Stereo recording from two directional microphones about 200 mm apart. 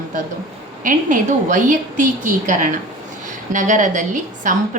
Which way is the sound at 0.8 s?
40° right (ahead or behind).